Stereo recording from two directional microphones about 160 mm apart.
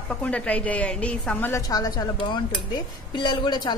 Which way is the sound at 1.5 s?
25° left (ahead or behind).